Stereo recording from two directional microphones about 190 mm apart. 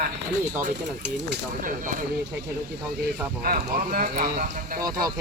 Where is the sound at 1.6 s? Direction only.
45° right (ahead or behind).